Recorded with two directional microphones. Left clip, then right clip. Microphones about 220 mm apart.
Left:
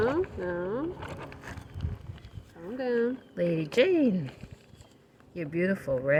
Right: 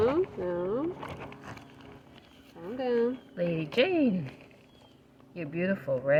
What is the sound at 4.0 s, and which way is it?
Speech, 50° left (ahead or behind).